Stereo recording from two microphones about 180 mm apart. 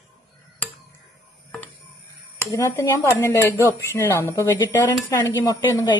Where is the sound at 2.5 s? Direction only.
15° left (ahead or behind).